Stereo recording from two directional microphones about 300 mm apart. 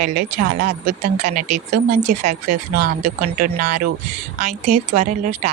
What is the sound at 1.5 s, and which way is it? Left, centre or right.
Speech, right.